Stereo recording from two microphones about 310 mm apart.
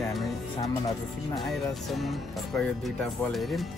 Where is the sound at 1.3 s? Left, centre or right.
Centre.